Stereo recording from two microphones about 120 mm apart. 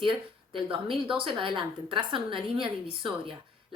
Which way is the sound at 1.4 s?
40° right (ahead or behind).